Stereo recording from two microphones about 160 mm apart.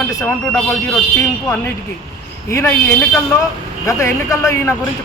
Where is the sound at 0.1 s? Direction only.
20° left (ahead or behind).